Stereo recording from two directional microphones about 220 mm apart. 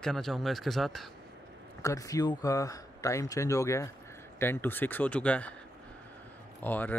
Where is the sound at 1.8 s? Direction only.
15° left (ahead or behind).